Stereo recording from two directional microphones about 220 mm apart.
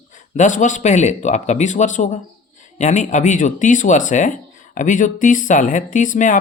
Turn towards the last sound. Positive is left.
turn(degrees=35)  # may be behind; listen again after turning